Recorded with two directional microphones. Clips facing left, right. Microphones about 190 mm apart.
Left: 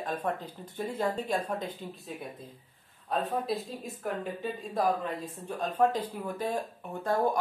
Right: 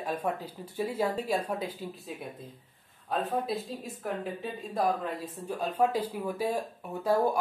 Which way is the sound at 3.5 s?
Centre (ahead or behind).